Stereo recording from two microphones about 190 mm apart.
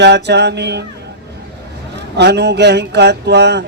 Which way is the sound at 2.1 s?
60° right (ahead or behind).